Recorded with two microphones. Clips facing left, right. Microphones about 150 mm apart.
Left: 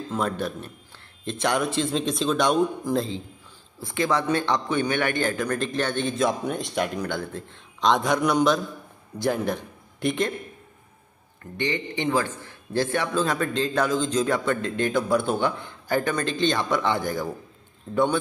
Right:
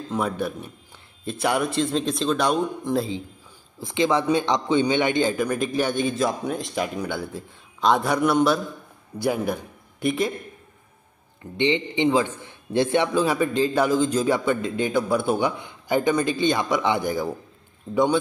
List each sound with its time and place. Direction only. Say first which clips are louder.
0.1 s a man's voice: right 2 dB; 10° right (ahead or behind)
3.8 s a man's voice: right 3 dB; 20° right (ahead or behind)
11.5 s a man's voice: right 5 dB; 20° right (ahead or behind)
13.1 s a man's voice: right 3 dB; 10° right (ahead or behind)